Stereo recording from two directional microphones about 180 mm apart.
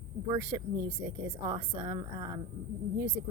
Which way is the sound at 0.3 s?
20° right (ahead or behind).